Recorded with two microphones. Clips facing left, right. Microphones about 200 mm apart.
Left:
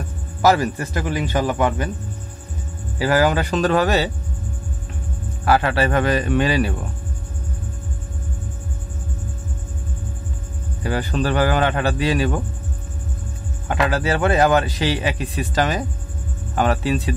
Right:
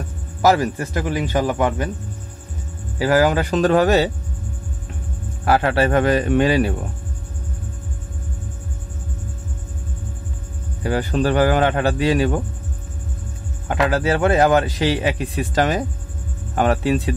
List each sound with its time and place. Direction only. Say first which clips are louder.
0.4 s a man's voice: even; 45° right (ahead or behind)
3.0 s a man's voice: right 1 dB; 45° right (ahead or behind)
5.4 s a man's voice: right 1 dB; 50° right (ahead or behind)
10.9 s a man's voice: right 2 dB; 45° right (ahead or behind)
13.7 s a man's voice: right 2 dB; 50° right (ahead or behind)